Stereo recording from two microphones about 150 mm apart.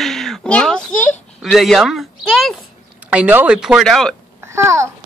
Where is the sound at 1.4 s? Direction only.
Centre (ahead or behind).